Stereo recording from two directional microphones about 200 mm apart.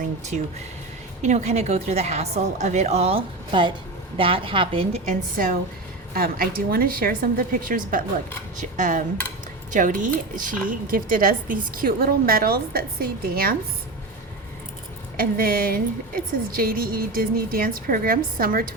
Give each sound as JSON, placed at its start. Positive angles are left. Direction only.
{"t": 1.2, "sound": "a woman's voice", "side_deg": -35}
{"t": 6.1, "sound": "a woman's voice", "side_deg": -45}
{"t": 15.1, "sound": "a woman's voice", "side_deg": -45}